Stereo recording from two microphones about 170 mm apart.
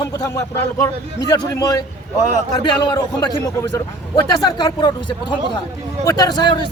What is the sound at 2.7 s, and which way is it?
Speech, 25° left (ahead or behind).